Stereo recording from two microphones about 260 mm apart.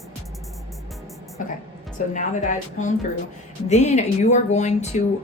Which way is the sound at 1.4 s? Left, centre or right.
Left.